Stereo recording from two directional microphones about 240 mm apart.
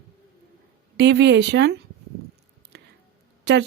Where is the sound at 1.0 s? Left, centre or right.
Right.